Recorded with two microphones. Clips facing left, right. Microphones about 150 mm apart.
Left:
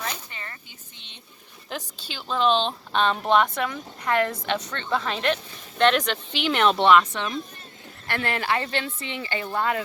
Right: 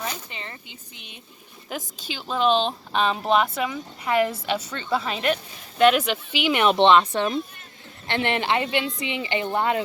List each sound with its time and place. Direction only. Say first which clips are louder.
0.0 s a sound: right 2 dB; 20° right (ahead or behind)
0.9 s speech: right 5 dB; 10° right (ahead or behind); by 7.3 s 35° right (ahead or behind)
8.0 s a woman's voice: right 3 dB; 20° right (ahead or behind)